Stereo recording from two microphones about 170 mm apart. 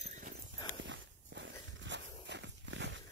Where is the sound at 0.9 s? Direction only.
90° right.